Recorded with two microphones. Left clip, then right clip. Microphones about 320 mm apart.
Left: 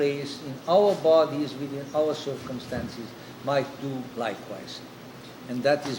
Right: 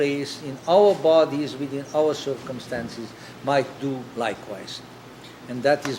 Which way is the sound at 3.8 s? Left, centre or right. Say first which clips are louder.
Right 4 dB; right.